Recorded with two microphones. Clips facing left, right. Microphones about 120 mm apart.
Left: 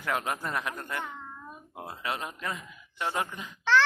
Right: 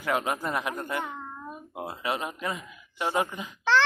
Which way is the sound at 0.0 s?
10° right (ahead or behind).